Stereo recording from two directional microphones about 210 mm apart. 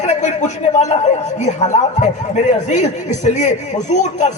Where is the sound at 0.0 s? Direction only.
35° left (ahead or behind).